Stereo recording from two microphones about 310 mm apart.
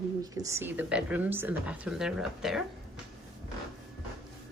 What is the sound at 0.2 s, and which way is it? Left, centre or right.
Speech, centre.